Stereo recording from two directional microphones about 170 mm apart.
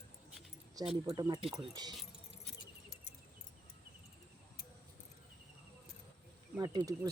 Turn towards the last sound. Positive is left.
turn(degrees=-25)  # may be behind; listen again after turning